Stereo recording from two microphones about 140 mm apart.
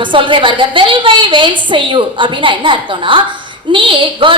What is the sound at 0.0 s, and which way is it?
A woman's voice, 35° right (ahead or behind).